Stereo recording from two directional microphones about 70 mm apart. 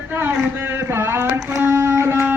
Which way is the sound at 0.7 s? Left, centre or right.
Right.